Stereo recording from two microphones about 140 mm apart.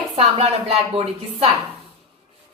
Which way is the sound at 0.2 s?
45° right (ahead or behind).